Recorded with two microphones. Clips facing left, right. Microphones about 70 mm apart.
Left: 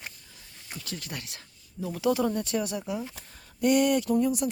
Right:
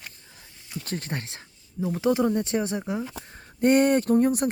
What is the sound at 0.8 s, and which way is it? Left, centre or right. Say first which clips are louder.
Speech: right 6 dB; right.